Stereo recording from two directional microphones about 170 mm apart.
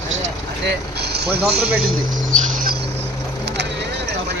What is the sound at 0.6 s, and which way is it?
Speech, 70° right (ahead or behind).